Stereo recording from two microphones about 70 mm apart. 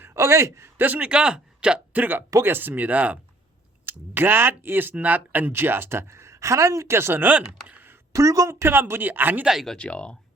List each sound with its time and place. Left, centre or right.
0.0 s a man's voice: right
0.8 s speech: right
3.8 s speech: right
8.1 s speech: right
9.4 s speech: centre
9.7 s speech: centre